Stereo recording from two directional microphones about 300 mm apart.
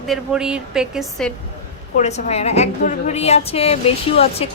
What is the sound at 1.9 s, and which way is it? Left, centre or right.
A woman's voice, left.